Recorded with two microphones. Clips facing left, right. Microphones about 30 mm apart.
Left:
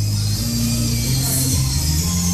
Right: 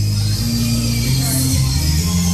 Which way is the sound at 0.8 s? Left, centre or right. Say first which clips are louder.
Right 3 dB; right.